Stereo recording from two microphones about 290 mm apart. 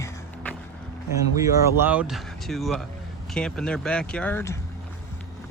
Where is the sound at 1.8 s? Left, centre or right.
Centre.